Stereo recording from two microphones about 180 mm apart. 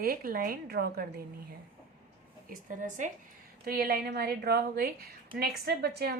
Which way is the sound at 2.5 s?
45° right (ahead or behind).